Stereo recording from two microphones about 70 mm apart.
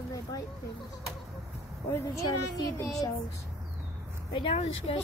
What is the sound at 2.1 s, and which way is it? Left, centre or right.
Speech, left.